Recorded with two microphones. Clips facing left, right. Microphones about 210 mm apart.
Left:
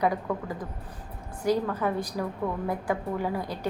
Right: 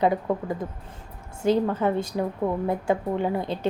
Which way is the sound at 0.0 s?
25° right (ahead or behind).